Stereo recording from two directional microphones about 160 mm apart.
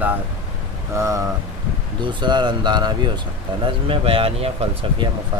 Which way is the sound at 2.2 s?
30° right (ahead or behind).